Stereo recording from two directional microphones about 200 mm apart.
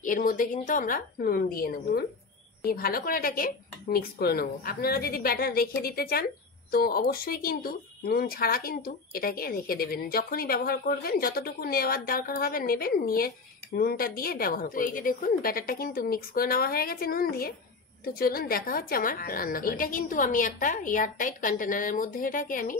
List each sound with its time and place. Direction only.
0.0 s speech: 45° left (ahead or behind)